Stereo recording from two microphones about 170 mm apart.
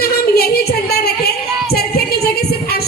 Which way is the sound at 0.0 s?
65° left (ahead or behind).